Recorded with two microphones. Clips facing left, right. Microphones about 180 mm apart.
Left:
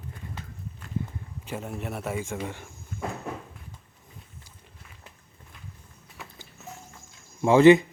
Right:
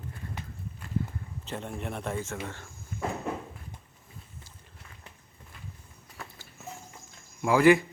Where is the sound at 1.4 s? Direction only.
5° left (ahead or behind).